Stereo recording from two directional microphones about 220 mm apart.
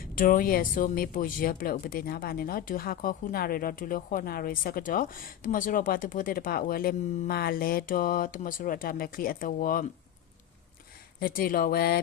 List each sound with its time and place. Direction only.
0.0 s speech: 40° left (ahead or behind)
11.2 s speech: 40° left (ahead or behind)